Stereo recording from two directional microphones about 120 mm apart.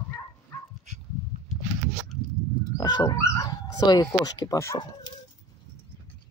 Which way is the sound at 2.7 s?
35° left (ahead or behind).